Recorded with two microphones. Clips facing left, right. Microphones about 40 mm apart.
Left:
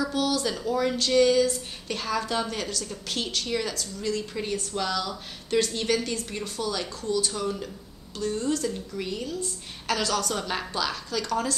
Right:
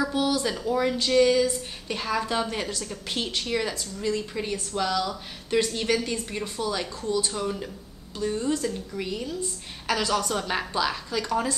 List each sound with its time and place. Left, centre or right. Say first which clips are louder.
0.0 s a woman's voice: right 1 dB; centre
4.4 s a woman's voice: right 1 dB; centre